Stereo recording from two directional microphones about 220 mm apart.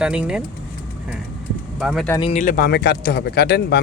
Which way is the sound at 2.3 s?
35° left (ahead or behind).